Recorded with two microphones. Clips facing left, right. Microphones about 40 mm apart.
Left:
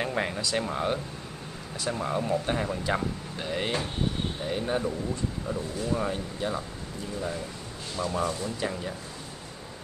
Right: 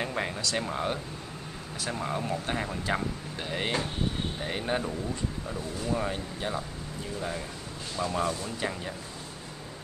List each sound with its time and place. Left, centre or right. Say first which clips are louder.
0.0 s speech: left 2 dB; centre
4.4 s speech: left 1 dB; right
5.5 s speech: left 2 dB; centre
8.0 s speech: left 1 dB; centre